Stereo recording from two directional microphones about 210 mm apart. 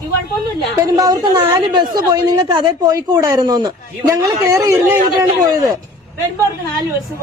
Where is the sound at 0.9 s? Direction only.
20° right (ahead or behind).